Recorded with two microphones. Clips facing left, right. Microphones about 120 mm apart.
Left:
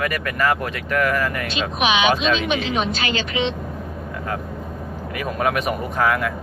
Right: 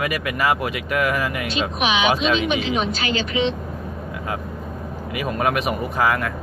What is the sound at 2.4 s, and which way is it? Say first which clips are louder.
Speech: even; 80° left.